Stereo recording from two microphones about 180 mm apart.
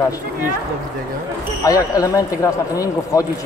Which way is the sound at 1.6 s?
20° left (ahead or behind).